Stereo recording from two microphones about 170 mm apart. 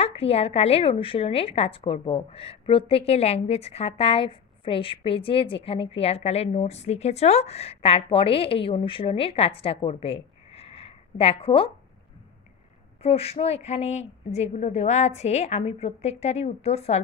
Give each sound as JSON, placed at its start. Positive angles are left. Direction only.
{"t": 0.0, "sound": "a woman's voice", "side_deg": 35}
{"t": 13.0, "sound": "a woman's voice", "side_deg": 35}